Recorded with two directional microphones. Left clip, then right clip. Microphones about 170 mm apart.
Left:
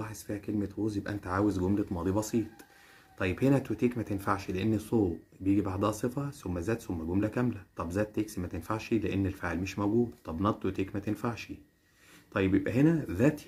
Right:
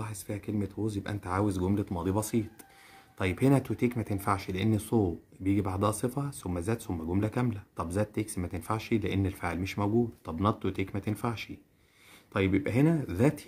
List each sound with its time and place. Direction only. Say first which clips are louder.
0.0 s speech: even; 35° right (ahead or behind)